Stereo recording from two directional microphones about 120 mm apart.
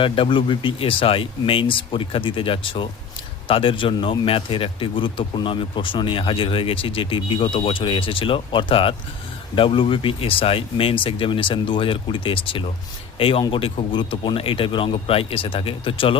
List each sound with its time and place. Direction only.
0.0 s a man's voice: 45° left (ahead or behind)